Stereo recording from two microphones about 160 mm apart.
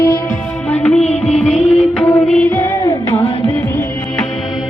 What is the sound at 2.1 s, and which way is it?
Music, 5° left (ahead or behind).